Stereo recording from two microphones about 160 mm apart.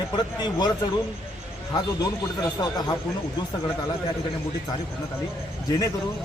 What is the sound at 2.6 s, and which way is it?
Speech, 25° left (ahead or behind).